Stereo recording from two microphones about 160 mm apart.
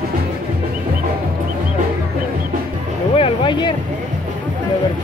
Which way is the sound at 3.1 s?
35° left (ahead or behind).